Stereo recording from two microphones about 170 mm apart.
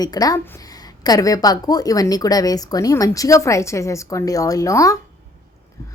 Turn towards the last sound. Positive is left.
turn(degrees=20)  # may be behind; listen again after turning